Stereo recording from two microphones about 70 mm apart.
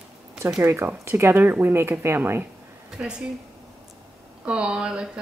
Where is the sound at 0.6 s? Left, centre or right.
Right.